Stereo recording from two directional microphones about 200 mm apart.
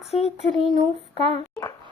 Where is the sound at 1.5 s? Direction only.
15° left (ahead or behind).